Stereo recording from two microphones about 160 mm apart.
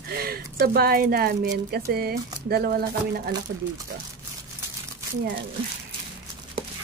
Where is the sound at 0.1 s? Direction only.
70° right (ahead or behind).